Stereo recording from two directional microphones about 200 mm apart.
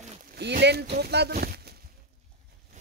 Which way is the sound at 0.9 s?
55° right (ahead or behind).